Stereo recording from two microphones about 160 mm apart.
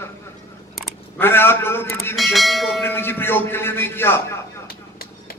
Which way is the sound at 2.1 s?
Centre (ahead or behind).